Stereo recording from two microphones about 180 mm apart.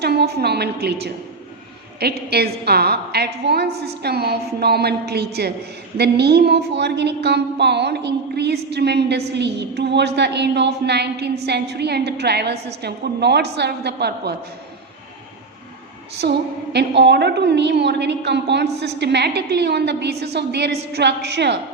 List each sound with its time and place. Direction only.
0.0 s a woman's voice: 65° right (ahead or behind)
16.2 s a woman's voice: 65° right (ahead or behind)